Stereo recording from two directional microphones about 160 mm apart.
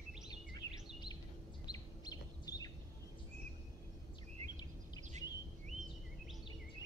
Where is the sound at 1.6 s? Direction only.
25° left (ahead or behind).